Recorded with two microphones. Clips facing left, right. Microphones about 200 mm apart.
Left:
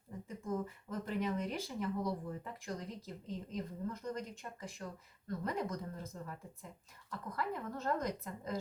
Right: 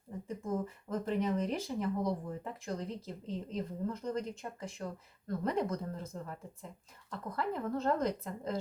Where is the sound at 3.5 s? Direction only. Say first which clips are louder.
Right 4 dB; 30° right (ahead or behind).